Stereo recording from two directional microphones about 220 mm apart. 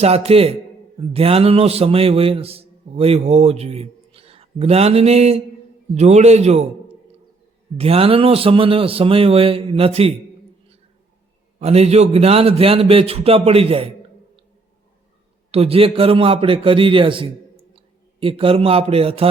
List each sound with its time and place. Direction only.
0.0 s a man's voice: 30° right (ahead or behind)
7.8 s speech: 25° right (ahead or behind)
11.6 s speech: 30° right (ahead or behind)
15.5 s a man's voice: 25° right (ahead or behind)